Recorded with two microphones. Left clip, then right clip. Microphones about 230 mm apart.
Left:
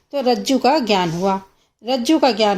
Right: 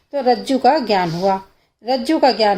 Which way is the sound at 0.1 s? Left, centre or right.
Left.